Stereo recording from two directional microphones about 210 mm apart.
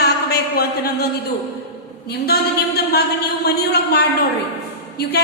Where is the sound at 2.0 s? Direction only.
50° left (ahead or behind).